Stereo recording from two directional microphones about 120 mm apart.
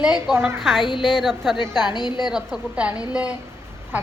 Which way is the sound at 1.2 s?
Centre (ahead or behind).